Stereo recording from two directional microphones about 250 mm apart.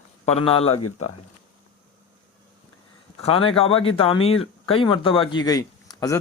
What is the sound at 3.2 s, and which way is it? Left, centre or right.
A man's voice, left.